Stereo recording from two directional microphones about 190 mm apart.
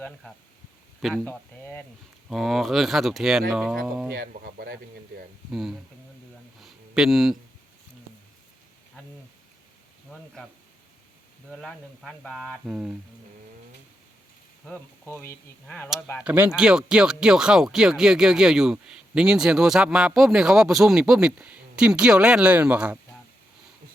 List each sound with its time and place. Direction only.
0.0 s speech: 5° left (ahead or behind)
4.1 s speech: 55° right (ahead or behind)
5.5 s speech: centre (ahead or behind)
6.6 s a sound: centre (ahead or behind)
11.5 s speech: 5° left (ahead or behind)
14.6 s speech: 10° left (ahead or behind)
16.2 s speech: 10° right (ahead or behind)